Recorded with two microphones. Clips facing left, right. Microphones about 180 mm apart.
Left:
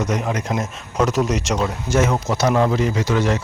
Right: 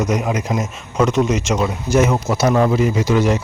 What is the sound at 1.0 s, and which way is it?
Speech, centre (ahead or behind).